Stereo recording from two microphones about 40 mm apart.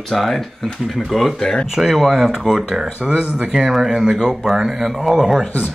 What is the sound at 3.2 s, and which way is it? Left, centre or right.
Speech, centre.